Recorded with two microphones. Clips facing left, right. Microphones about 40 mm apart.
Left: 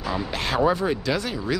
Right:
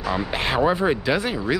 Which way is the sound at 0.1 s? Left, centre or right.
Right.